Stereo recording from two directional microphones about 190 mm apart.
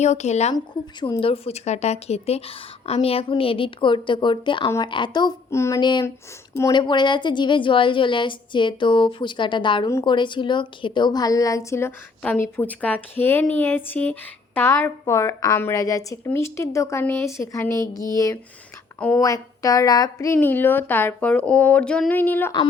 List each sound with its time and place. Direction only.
0.0 s a woman's voice: 35° left (ahead or behind)
0.5 s a woman's voice: 25° left (ahead or behind)
18.9 s a woman's voice: 5° left (ahead or behind)
19.2 s a woman's voice: 20° left (ahead or behind)